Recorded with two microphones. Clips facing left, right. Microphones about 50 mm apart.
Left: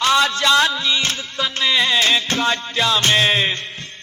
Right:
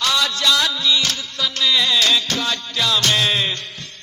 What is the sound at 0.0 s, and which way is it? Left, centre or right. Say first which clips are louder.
Music: left 3 dB; left.